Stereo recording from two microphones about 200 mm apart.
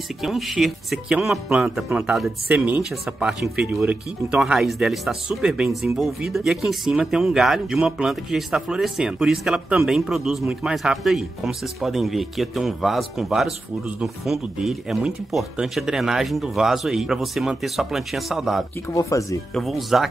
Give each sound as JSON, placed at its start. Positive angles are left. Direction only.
{"t": 0.2, "sound": "speech", "side_deg": 0}
{"t": 18.9, "sound": "speech", "side_deg": 15}
{"t": 19.5, "sound": "speech", "side_deg": 0}